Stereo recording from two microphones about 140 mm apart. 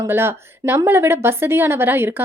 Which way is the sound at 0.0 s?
15° right (ahead or behind).